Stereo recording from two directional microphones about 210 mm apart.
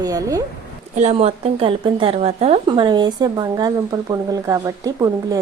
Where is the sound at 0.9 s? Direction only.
30° right (ahead or behind).